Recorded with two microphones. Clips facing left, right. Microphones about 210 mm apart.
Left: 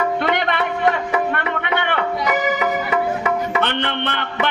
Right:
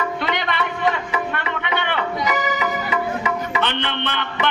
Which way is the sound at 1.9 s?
50° left (ahead or behind).